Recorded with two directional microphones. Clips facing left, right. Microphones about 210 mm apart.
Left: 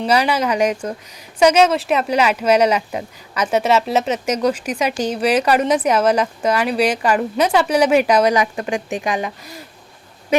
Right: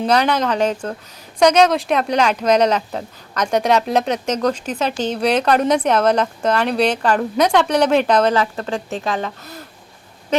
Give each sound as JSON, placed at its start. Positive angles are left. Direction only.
{"t": 0.1, "sound": "a woman's voice", "side_deg": 10}